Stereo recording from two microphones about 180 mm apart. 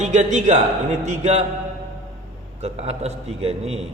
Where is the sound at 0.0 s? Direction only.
40° right (ahead or behind).